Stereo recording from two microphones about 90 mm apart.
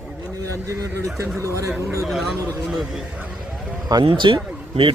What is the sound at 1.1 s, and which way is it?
Speech, 35° right (ahead or behind).